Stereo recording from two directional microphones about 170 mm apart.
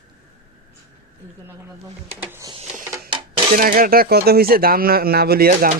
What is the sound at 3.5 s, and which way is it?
Speech, 55° right (ahead or behind).